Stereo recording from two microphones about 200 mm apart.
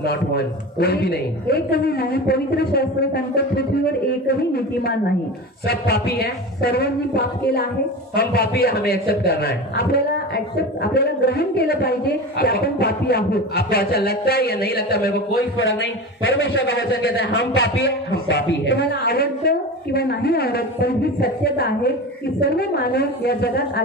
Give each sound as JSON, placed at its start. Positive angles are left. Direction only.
{"t": 0.0, "sound": "a man's voice", "side_deg": 55}
{"t": 5.7, "sound": "a man's voice", "side_deg": 55}